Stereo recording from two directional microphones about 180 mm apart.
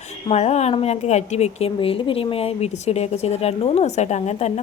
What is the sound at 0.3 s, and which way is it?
Speech, 35° left (ahead or behind).